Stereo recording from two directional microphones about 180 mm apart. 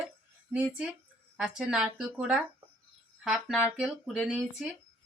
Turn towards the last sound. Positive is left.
turn(degrees=-5)  # may be behind; listen again after turning